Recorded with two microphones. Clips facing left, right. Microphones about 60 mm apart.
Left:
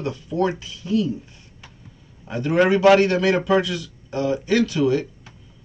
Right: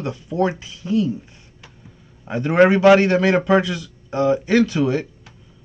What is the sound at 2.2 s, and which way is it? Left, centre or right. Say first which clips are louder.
Speech: right 4 dB; right.